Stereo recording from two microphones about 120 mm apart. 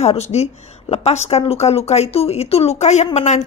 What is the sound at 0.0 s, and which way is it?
A woman's voice, 60° left (ahead or behind).